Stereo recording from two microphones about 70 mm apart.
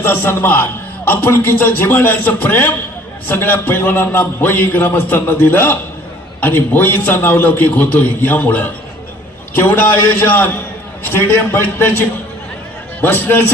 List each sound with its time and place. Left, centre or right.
0.0 s a man's voice: left